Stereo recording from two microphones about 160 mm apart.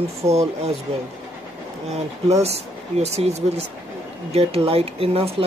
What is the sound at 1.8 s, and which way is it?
Speech, 40° right (ahead or behind).